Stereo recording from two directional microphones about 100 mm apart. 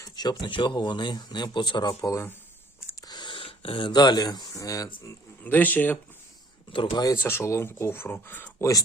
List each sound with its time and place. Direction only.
0.2 s speech: 50° left (ahead or behind)
2.0 s speech: 35° left (ahead or behind)
3.1 s speech: 50° left (ahead or behind); by 5.1 s 35° left (ahead or behind)
5.4 s speech: 20° left (ahead or behind)
6.7 s speech: 55° left (ahead or behind)
7.0 s speech: 35° left (ahead or behind)